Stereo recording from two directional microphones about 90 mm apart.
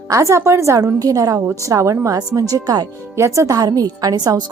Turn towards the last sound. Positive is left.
turn(degrees=-45)  # may be behind; listen again after turning